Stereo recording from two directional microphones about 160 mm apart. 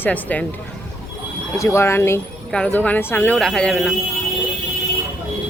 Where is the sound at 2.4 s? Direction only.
5° left (ahead or behind).